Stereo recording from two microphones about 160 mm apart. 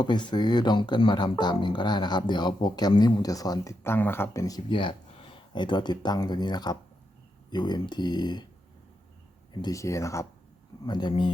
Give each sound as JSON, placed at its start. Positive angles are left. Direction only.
{"t": 0.0, "sound": "speech", "side_deg": 30}
{"t": 9.5, "sound": "speech", "side_deg": 25}